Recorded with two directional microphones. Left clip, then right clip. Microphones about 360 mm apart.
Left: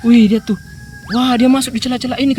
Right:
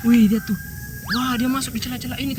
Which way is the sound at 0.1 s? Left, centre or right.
Centre.